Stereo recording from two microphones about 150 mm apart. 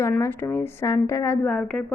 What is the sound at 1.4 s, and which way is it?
Speech, 5° left (ahead or behind).